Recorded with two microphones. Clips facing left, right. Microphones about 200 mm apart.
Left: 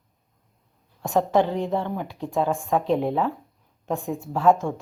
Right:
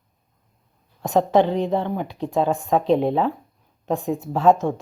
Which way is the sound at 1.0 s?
20° right (ahead or behind).